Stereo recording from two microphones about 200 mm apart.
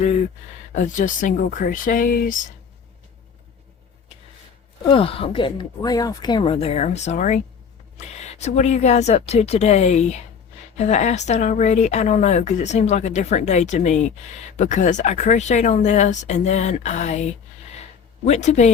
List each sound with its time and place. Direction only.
0.7 s speech: 40° left (ahead or behind)
4.9 s speech: 25° left (ahead or behind)
18.3 s speech: 35° left (ahead or behind)